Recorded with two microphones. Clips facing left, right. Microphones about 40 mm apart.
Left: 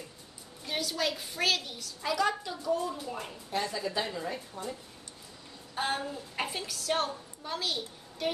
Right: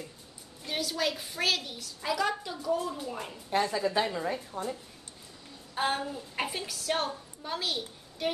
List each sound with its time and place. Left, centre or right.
0.7 s a woman's voice: centre
3.7 s a woman's voice: right
5.8 s a woman's voice: centre